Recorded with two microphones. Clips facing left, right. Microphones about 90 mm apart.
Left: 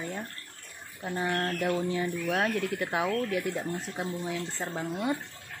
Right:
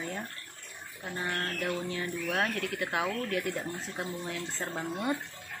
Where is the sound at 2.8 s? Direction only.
25° left (ahead or behind).